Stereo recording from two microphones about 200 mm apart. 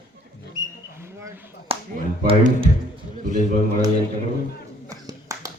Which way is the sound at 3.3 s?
40° right (ahead or behind).